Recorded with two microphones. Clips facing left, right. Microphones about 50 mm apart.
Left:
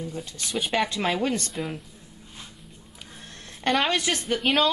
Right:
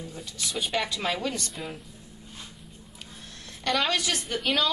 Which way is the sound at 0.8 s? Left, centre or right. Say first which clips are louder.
Left 4 dB; left.